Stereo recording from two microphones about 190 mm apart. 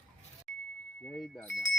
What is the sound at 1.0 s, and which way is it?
Speech, centre (ahead or behind).